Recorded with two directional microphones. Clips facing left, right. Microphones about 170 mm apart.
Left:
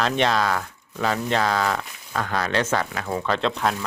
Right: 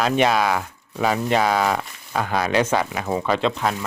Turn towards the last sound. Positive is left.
turn(degrees=0)  # may be behind; listen again after turning